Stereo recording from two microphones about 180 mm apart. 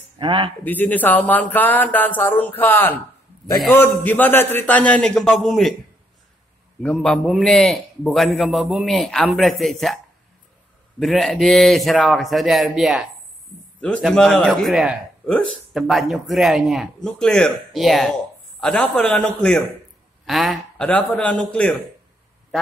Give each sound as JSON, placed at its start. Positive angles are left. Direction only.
{"t": 0.2, "sound": "speech", "side_deg": -25}
{"t": 0.7, "sound": "speech", "side_deg": 10}
{"t": 6.8, "sound": "a man's voice", "side_deg": 5}
{"t": 11.0, "sound": "a man's voice", "side_deg": 0}